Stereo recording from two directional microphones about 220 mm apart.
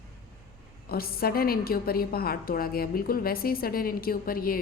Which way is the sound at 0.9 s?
45° left (ahead or behind).